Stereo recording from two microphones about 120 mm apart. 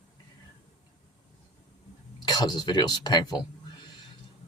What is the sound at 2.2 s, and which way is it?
Speech, 35° left (ahead or behind).